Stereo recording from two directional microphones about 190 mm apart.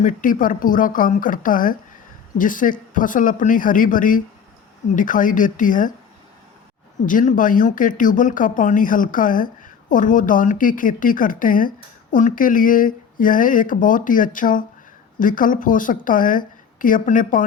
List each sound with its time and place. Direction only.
0.0 s speech: 45° left (ahead or behind)
7.0 s speech: 45° left (ahead or behind)